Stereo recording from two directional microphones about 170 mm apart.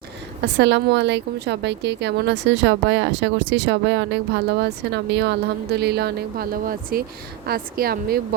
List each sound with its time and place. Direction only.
0.4 s a woman's voice: 90° right; by 8.4 s 65° right (ahead or behind)